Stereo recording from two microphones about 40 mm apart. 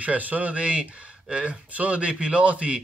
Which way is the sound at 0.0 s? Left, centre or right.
Right.